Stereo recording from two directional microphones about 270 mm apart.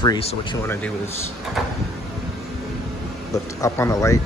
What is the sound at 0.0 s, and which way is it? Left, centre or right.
Speech, centre.